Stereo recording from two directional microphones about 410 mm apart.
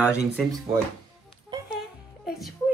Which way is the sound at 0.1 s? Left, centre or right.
Centre.